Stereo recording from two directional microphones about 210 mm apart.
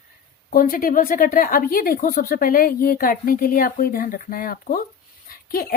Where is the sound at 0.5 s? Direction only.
45° left (ahead or behind).